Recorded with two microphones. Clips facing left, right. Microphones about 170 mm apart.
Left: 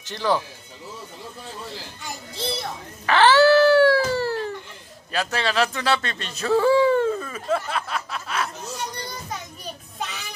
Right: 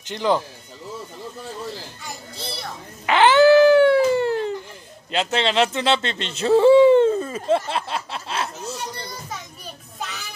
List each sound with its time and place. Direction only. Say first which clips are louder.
0.0 s speech: right 2 dB; 15° right (ahead or behind)
3.1 s dog: right 2 dB; 20° right (ahead or behind)
5.1 s speech: right 3 dB; 20° right (ahead or behind)